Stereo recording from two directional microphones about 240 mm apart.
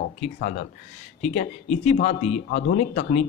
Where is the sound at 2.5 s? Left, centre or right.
Left.